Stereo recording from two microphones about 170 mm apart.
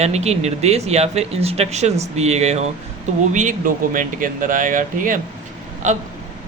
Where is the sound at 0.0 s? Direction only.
40° right (ahead or behind).